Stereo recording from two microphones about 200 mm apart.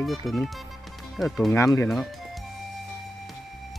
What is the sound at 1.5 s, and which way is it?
Speech, 15° left (ahead or behind).